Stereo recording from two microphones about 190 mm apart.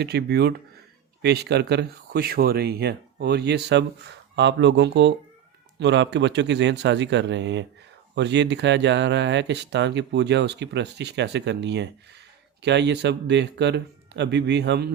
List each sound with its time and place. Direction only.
0.0 s speech: 60° right (ahead or behind)